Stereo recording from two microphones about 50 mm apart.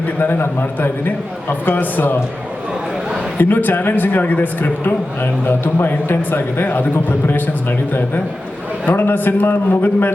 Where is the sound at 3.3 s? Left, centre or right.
Left.